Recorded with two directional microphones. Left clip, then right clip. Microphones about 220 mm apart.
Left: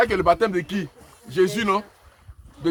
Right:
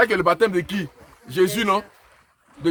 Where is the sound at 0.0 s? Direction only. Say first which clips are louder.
Right 1 dB; 50° right (ahead or behind).